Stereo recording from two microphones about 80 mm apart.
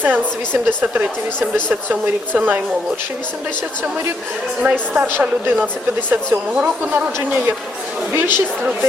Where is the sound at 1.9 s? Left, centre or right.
Centre.